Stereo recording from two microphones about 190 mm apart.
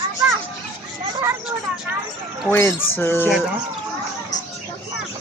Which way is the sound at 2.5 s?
10° left (ahead or behind).